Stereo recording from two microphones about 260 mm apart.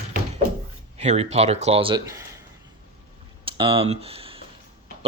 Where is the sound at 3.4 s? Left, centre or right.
Centre.